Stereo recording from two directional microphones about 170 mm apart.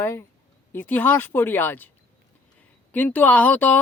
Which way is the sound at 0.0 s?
15° left (ahead or behind).